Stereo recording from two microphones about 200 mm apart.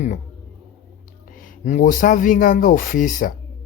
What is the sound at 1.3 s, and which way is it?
Speech, 35° left (ahead or behind).